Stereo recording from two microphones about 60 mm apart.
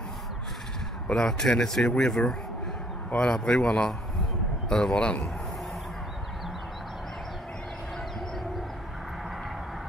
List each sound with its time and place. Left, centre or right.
1.0 s speech: centre